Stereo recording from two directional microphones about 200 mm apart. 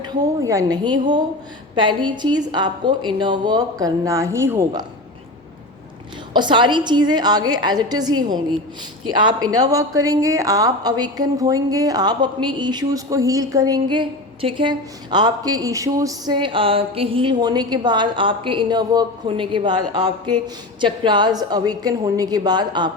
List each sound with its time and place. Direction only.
0.0 s a woman's voice: 20° right (ahead or behind)
6.3 s a woman's voice: 25° right (ahead or behind)
9.6 s a woman's voice: 15° right (ahead or behind)